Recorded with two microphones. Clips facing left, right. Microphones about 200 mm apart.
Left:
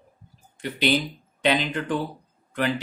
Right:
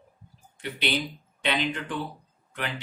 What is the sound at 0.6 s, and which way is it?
Speech, 40° left (ahead or behind).